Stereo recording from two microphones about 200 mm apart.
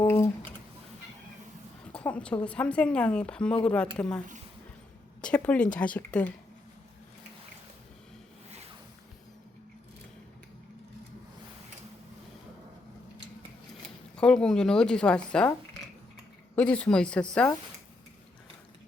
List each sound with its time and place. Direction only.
0.0 s a sound: 15° left (ahead or behind)
1.9 s a woman's voice: 5° left (ahead or behind)
5.2 s a woman's voice: 5° left (ahead or behind)
8.4 s zipper: 30° right (ahead or behind)
14.2 s a woman's voice: 5° left (ahead or behind)
16.6 s a woman's voice: 5° left (ahead or behind)